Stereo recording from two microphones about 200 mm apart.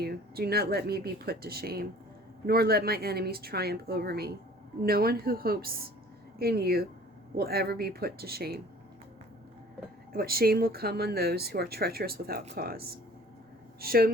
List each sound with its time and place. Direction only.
0.0 s speech: 50° right (ahead or behind)
10.1 s speech: 50° right (ahead or behind)
13.8 s speech: 50° right (ahead or behind)